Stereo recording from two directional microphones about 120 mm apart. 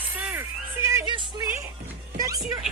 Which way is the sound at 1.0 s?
40° right (ahead or behind).